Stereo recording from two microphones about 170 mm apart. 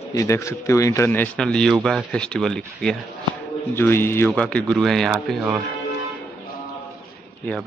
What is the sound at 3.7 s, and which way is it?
A man's voice, 15° left (ahead or behind).